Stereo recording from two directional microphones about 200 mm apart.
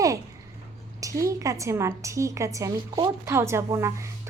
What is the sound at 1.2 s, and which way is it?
A woman's voice, 15° right (ahead or behind).